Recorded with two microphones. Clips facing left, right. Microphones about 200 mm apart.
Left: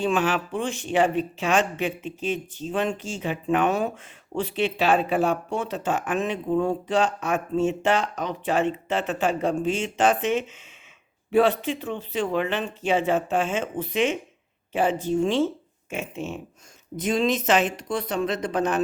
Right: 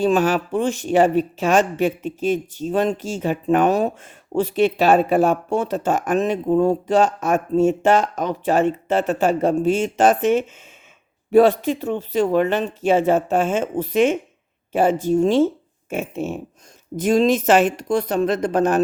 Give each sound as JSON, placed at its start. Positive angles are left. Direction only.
{"t": 0.0, "sound": "speech", "side_deg": -40}